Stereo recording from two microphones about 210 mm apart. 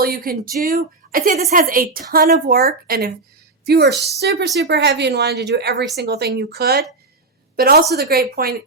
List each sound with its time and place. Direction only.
0.0 s a woman's voice: 45° right (ahead or behind)